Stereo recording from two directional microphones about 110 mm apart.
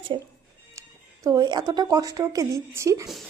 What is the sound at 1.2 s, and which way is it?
A woman's voice, 40° right (ahead or behind).